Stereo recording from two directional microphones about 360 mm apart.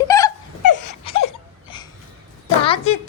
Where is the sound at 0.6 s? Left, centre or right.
Left.